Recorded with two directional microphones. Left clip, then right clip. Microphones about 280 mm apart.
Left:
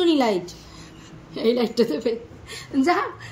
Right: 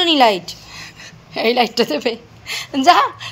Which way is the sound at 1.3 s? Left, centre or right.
Centre.